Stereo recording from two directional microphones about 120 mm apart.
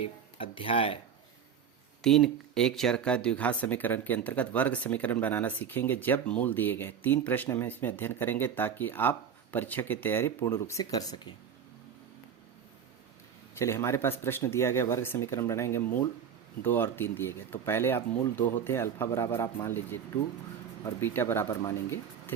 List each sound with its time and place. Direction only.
0.0 s speech: 50° left (ahead or behind)
2.0 s speech: 5° left (ahead or behind); by 11.3 s 35° left (ahead or behind)
13.6 s speech: 20° left (ahead or behind)